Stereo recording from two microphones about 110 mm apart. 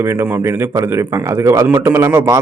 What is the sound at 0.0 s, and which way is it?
A man's voice, 25° right (ahead or behind).